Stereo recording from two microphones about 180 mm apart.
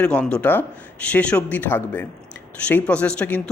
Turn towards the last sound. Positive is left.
turn(degrees=10)  # may be behind; listen again after turning